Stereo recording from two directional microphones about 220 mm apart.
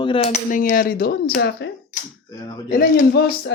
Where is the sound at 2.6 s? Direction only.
40° left (ahead or behind).